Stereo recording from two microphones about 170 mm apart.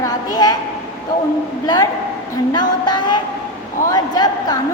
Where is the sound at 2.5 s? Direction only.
25° left (ahead or behind).